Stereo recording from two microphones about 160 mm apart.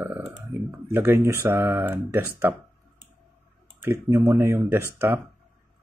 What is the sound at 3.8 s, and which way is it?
Speech, 15° right (ahead or behind).